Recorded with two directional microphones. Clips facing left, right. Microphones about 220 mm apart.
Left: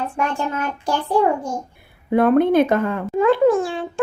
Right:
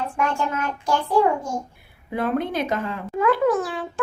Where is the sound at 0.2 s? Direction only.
35° left (ahead or behind).